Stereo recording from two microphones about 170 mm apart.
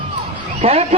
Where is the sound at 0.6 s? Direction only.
35° right (ahead or behind).